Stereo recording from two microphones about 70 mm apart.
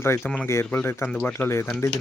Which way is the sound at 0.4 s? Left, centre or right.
Left.